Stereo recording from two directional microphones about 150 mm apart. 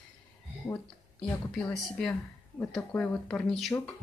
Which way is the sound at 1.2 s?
Centre (ahead or behind).